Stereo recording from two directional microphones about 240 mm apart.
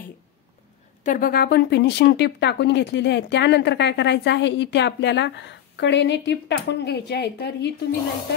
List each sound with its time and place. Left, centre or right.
1.0 s speech: left